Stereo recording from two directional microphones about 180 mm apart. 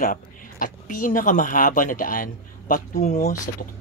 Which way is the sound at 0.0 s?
50° left (ahead or behind).